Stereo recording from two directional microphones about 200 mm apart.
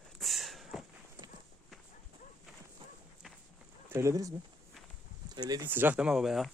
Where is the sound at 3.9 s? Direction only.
15° right (ahead or behind).